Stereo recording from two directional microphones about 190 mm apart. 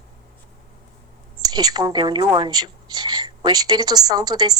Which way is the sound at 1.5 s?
20° right (ahead or behind).